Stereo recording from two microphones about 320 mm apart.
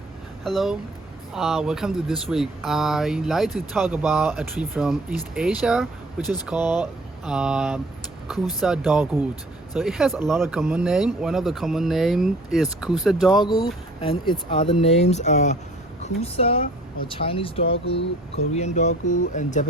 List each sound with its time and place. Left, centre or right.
0.4 s speech: centre
13.4 s speech: centre